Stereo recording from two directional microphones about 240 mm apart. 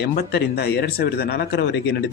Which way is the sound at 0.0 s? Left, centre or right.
Left.